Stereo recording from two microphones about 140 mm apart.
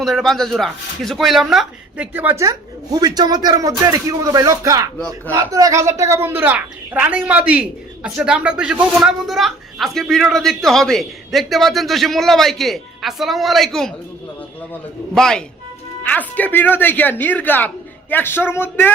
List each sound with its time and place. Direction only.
0.0 s a woman's voice: centre (ahead or behind)
2.4 s a man's voice: 25° right (ahead or behind)
4.9 s a woman's voice: 5° left (ahead or behind)
5.3 s a woman's voice: 25° right (ahead or behind); by 13.9 s centre (ahead or behind)
15.1 s a woman's voice: 5° left (ahead or behind)